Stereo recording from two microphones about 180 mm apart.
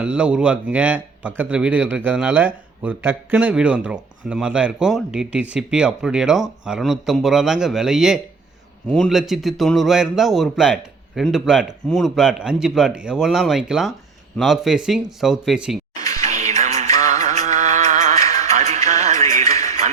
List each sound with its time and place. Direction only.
0.0 s a man's voice: 5° right (ahead or behind)
16.0 s music: 20° left (ahead or behind)
16.2 s music: 40° right (ahead or behind)
16.8 s music: 20° left (ahead or behind)
17.1 s music: 40° right (ahead or behind)
18.2 s music: 20° left (ahead or behind)
18.5 s music: 40° right (ahead or behind)